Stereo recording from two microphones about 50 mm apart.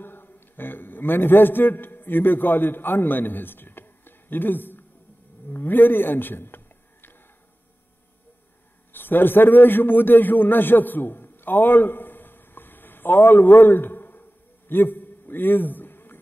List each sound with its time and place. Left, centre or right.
0.0 s a man's voice: left
8.9 s a man's voice: left
14.7 s a sound: left